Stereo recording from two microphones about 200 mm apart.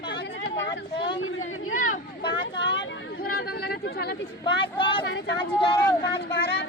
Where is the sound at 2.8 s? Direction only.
65° left (ahead or behind).